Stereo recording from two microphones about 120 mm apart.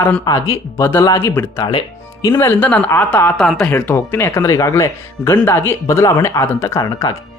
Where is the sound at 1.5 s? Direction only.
45° left (ahead or behind).